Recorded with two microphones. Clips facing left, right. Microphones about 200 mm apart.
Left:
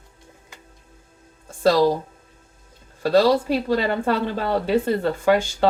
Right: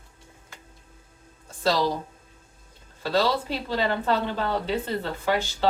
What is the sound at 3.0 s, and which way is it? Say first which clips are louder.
Speech: left 7 dB; 50° left (ahead or behind).